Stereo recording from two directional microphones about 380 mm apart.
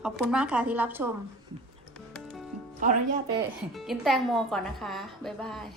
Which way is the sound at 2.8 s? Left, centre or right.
Right.